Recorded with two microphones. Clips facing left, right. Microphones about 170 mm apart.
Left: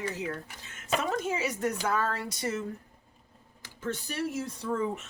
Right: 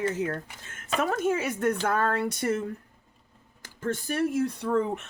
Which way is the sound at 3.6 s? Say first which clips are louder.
Right 4 dB; 50° right (ahead or behind).